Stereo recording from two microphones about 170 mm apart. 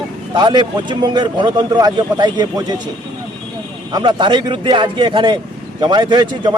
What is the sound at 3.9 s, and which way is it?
Speech, 25° right (ahead or behind).